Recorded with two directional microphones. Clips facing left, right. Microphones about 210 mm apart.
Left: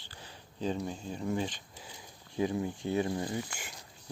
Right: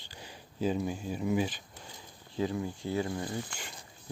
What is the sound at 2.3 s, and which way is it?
Speech, 20° left (ahead or behind).